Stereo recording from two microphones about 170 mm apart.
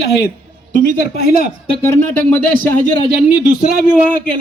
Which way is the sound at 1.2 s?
60° left (ahead or behind).